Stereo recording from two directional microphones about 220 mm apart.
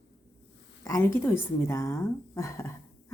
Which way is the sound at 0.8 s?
10° left (ahead or behind).